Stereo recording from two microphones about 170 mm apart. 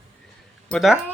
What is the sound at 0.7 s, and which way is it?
Speech, centre (ahead or behind).